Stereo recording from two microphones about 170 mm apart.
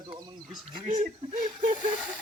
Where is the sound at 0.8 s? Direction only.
45° right (ahead or behind).